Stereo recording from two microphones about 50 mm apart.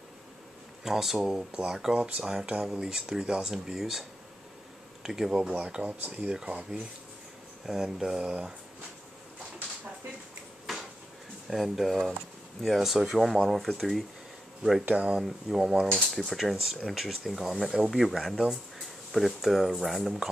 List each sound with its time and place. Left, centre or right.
0.8 s speech: centre
1.3 s speech: centre
5.0 s speech: centre
5.5 s speech: right
7.6 s speech: centre
10.7 s a sound: centre
11.5 s speech: centre
15.1 s speech: centre